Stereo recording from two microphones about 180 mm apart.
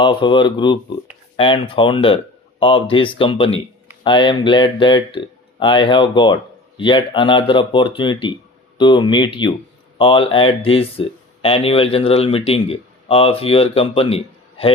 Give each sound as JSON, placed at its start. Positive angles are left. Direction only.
{"t": 0.0, "sound": "speech", "side_deg": 25}